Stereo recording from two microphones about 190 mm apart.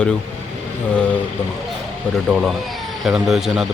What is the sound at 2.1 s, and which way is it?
Speech, centre (ahead or behind).